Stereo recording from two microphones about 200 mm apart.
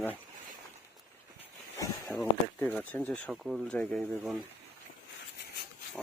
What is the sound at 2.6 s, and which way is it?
Speech, 10° left (ahead or behind).